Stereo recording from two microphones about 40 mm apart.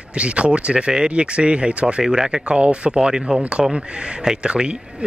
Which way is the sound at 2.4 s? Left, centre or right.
Right.